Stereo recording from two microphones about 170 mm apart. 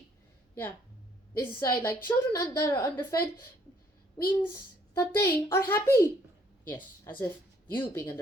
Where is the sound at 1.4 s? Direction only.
15° left (ahead or behind).